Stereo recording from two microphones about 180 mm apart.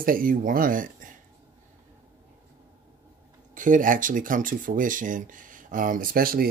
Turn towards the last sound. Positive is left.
turn(degrees=-55)  # may be behind; listen again after turning